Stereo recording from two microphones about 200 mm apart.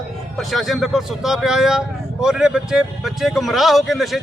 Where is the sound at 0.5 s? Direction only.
Centre (ahead or behind).